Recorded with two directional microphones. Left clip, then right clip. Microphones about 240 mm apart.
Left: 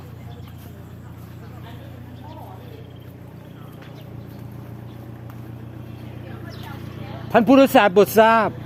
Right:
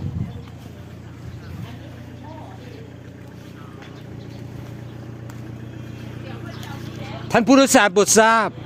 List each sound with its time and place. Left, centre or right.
7.3 s speech: right